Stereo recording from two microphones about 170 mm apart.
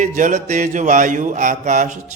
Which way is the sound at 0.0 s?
45° right (ahead or behind).